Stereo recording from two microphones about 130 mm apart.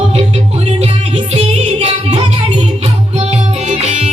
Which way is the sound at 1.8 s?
50° right (ahead or behind).